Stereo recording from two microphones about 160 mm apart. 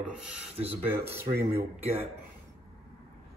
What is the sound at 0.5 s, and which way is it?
Speech, 40° right (ahead or behind).